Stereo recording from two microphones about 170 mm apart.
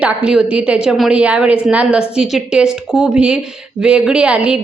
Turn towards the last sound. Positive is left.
turn(degrees=-5)  # may be behind; listen again after turning